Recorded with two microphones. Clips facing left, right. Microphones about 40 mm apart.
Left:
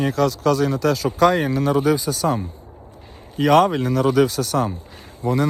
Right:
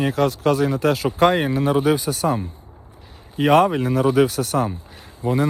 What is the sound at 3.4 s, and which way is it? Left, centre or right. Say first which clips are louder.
Speech: even; right.